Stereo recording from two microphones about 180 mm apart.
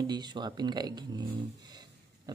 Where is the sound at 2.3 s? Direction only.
20° right (ahead or behind).